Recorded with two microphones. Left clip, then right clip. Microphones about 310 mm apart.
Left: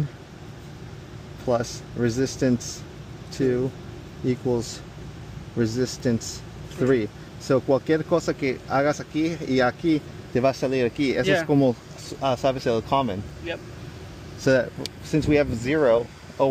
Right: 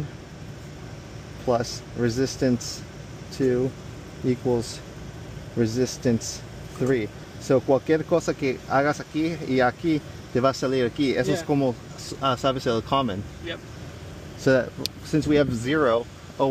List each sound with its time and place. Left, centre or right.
1.5 s speech: centre